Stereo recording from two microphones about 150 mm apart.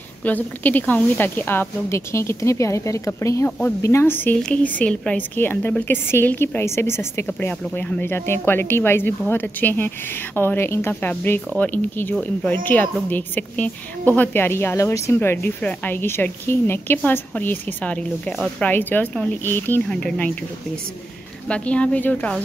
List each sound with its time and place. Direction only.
0.2 s a woman's voice: 10° left (ahead or behind)
21.5 s a woman's voice: 10° left (ahead or behind)